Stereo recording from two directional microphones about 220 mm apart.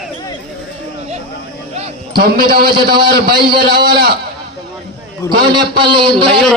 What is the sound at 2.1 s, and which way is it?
A man's voice, 45° right (ahead or behind).